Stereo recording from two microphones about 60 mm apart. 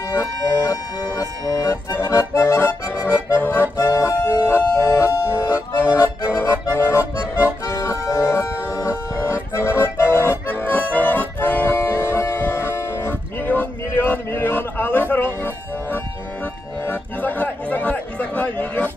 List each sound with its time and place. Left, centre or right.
0.1 s music: left
1.5 s accordion: left
3.3 s accordion: left
3.7 s music: left
5.8 s accordion: left
7.6 s music: left
9.5 s accordion: left
11.7 s music: left
13.5 s a sound: left
16.8 s music: left